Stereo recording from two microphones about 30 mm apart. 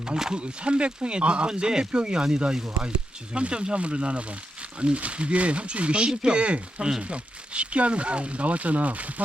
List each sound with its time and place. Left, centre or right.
0.3 s speech: right
1.5 s speech: right